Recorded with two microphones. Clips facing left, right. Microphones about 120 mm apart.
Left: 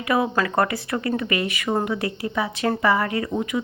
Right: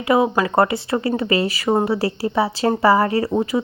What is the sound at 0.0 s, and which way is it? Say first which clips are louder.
Speech: right 5 dB; 25° right (ahead or behind).